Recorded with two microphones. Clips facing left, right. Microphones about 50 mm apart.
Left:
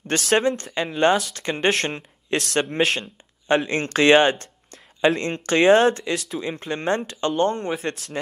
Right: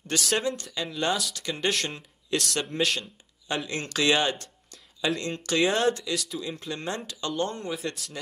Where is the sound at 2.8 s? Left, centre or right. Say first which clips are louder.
Left 5 dB; left.